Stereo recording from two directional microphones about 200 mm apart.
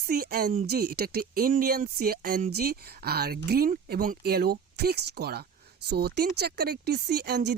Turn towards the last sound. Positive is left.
turn(degrees=-55)  # may be behind; listen again after turning